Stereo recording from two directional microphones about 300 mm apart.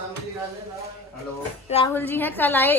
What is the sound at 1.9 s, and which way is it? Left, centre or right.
Speech, centre.